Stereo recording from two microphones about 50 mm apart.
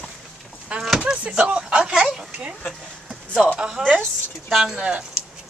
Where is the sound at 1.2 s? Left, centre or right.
Right.